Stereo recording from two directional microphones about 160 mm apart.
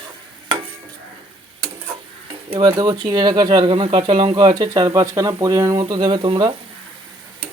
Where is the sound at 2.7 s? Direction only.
25° right (ahead or behind).